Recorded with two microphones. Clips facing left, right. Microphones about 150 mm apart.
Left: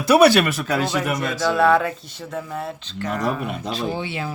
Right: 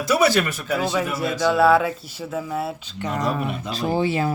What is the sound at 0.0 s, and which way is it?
Speech, 65° left (ahead or behind).